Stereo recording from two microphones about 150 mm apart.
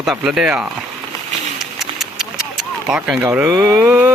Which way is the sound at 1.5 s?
Centre (ahead or behind).